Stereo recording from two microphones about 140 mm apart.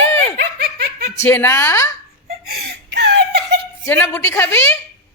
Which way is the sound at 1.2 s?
15° left (ahead or behind).